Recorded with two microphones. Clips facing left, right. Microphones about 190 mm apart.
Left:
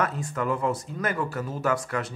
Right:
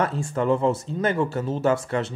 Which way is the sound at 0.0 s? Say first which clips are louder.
Right 4 dB; 30° right (ahead or behind).